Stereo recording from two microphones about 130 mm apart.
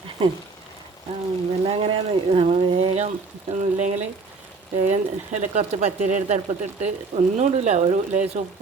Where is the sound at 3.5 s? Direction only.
70° right (ahead or behind).